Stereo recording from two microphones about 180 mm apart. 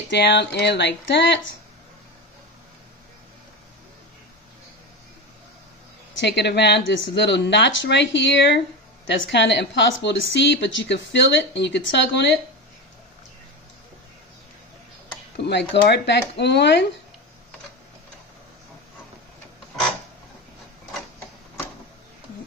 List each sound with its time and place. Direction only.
0.1 s speech: 70° left (ahead or behind)
6.1 s speech: 75° left (ahead or behind)
15.3 s speech: 70° left (ahead or behind)